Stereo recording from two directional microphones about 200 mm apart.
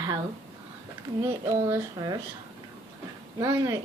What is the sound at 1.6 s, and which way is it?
Speech, 15° right (ahead or behind).